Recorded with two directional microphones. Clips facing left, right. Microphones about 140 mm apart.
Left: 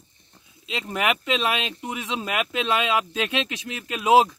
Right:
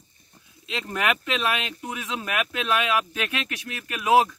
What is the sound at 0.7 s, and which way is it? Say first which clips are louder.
Speech: left 1 dB; 15° left (ahead or behind).